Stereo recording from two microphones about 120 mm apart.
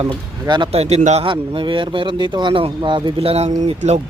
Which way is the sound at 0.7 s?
60° right (ahead or behind).